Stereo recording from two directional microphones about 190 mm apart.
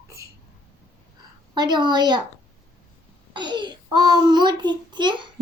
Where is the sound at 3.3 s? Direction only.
25° right (ahead or behind).